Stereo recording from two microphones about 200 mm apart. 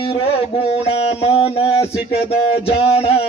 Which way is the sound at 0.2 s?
30° left (ahead or behind).